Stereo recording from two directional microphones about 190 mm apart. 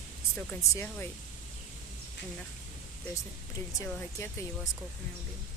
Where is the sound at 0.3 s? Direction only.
15° left (ahead or behind).